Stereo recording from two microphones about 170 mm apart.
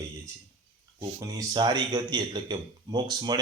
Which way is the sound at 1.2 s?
20° right (ahead or behind).